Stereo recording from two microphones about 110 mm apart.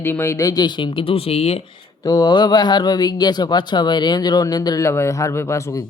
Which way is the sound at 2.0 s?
40° left (ahead or behind).